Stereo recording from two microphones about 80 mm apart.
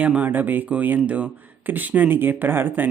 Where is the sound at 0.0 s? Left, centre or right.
Centre.